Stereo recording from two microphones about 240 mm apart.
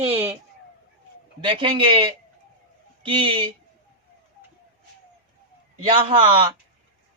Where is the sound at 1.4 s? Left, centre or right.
Right.